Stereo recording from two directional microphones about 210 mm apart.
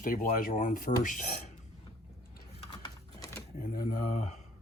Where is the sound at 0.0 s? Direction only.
40° left (ahead or behind).